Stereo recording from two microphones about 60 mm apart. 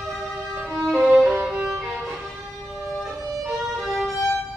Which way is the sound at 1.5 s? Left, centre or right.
Centre.